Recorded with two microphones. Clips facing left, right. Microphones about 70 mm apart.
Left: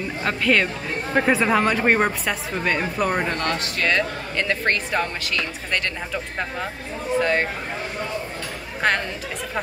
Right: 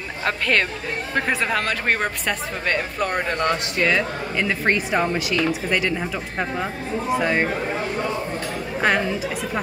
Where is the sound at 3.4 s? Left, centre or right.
Centre.